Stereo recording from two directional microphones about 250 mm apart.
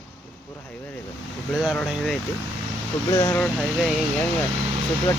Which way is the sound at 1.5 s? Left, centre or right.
Centre.